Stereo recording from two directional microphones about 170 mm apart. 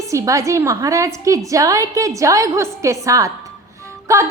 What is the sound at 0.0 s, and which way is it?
A woman's voice, 20° right (ahead or behind).